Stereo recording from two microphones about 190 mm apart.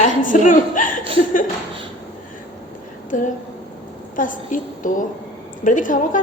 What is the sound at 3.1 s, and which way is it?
A woman's voice, 45° left (ahead or behind).